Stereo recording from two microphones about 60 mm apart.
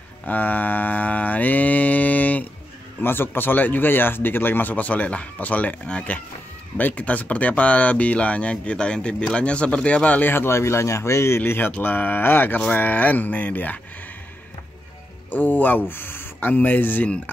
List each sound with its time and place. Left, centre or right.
0.3 s mantra: left
3.0 s speech: left
10.3 s speech: left
12.5 s speech: left
15.3 s speech: left